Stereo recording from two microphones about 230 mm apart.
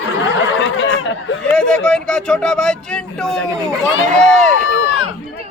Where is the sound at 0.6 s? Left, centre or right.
Left.